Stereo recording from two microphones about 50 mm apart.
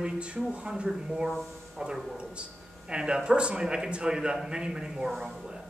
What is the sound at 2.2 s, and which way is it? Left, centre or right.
Speech, right.